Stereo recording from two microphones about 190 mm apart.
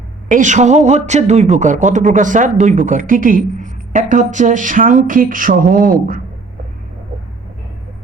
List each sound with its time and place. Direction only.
0.3 s a woman's voice: 40° right (ahead or behind)